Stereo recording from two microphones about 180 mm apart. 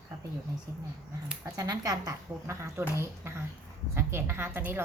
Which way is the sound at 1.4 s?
20° right (ahead or behind).